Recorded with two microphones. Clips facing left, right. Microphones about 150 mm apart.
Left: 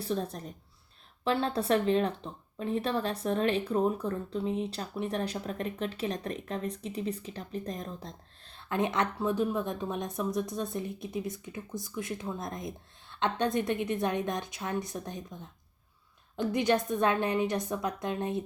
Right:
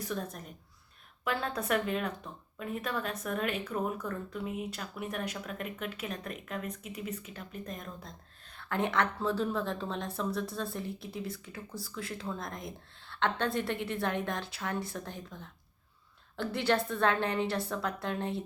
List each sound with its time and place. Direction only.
0.0 s speech: 30° left (ahead or behind)
8.5 s a woman's voice: 20° left (ahead or behind)